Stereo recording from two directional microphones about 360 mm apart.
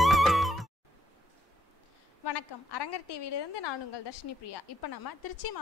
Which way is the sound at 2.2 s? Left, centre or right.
Left.